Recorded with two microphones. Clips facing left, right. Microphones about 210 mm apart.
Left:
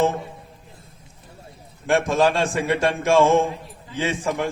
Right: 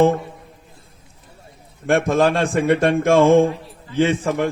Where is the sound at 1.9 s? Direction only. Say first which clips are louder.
Right 2 dB; 55° right (ahead or behind).